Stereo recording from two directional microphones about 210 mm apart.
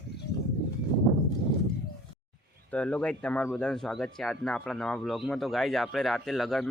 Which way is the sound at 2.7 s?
5° left (ahead or behind).